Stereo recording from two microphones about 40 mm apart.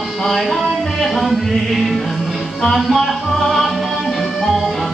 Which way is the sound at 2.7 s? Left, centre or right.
Centre.